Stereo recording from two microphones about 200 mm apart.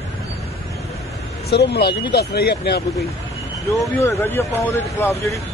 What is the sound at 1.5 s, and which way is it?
Speech, 55° left (ahead or behind).